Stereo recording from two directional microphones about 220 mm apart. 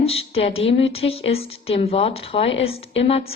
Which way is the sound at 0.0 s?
25° left (ahead or behind).